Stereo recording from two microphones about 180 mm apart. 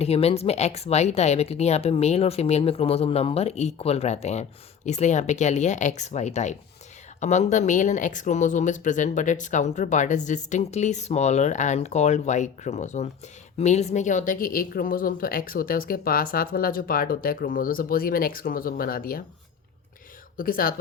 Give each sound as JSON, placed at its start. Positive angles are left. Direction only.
{"t": 0.0, "sound": "a woman's voice", "side_deg": 35}
{"t": 20.3, "sound": "speech", "side_deg": 50}